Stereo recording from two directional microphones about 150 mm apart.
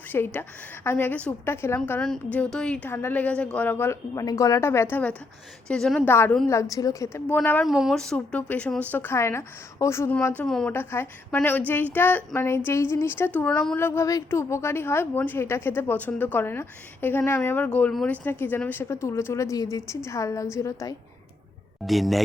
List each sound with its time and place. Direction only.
0.1 s a woman's voice: 15° left (ahead or behind)
6.1 s a woman's voice: 15° left (ahead or behind)
7.6 s a woman's voice: centre (ahead or behind)
10.8 s a woman's voice: 15° left (ahead or behind)
21.8 s a woman's voice: centre (ahead or behind)